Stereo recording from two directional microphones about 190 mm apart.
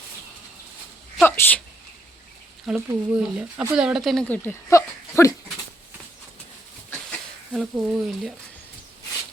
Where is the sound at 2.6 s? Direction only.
10° right (ahead or behind); by 5.3 s 15° left (ahead or behind).